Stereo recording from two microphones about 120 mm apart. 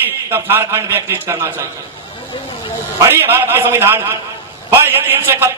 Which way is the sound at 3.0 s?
20° right (ahead or behind).